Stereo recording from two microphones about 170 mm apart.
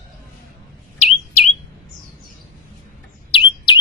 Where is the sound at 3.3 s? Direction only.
25° left (ahead or behind).